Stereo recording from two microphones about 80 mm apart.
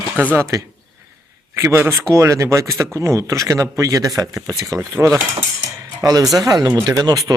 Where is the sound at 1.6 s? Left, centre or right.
Right.